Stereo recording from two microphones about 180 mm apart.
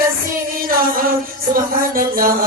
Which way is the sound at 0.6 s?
55° right (ahead or behind).